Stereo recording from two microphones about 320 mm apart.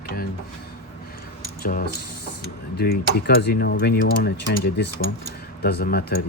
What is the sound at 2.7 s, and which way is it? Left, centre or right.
Speech, left.